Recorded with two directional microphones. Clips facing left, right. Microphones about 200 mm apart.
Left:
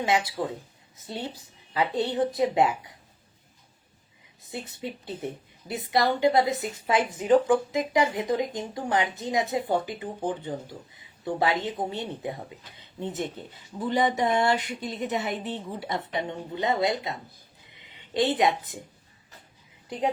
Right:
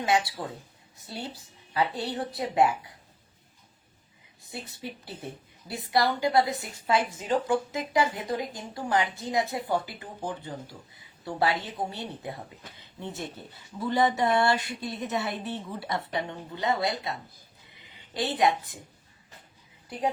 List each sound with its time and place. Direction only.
1.0 s a woman's voice: 20° left (ahead or behind)
4.6 s a woman's voice: 20° left (ahead or behind)